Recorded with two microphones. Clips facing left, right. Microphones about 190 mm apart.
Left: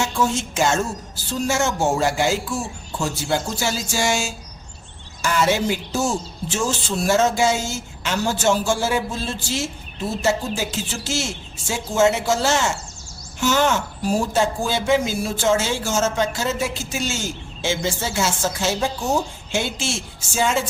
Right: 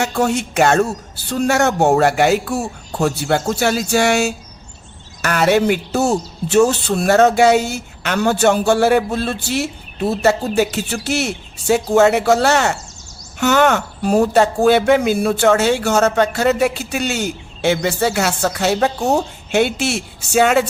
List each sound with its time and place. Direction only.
0.0 s speech: 65° right (ahead or behind)